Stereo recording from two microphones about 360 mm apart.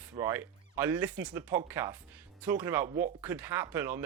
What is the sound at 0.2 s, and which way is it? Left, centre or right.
Speech, centre.